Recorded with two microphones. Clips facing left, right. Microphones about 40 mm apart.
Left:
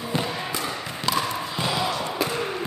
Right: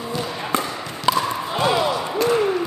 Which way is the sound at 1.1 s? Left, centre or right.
Right.